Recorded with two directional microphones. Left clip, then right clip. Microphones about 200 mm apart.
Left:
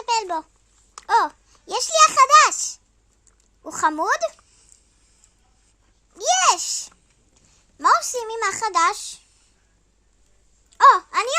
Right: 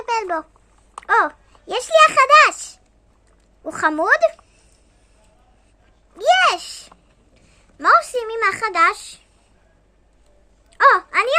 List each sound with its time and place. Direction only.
0.1 s a sound: 15° left (ahead or behind)
0.9 s a child's voice: 15° left (ahead or behind)
6.1 s a child's voice: 20° left (ahead or behind)
10.7 s speech: 15° left (ahead or behind)